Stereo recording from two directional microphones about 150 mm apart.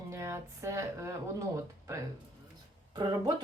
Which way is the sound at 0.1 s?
20° right (ahead or behind).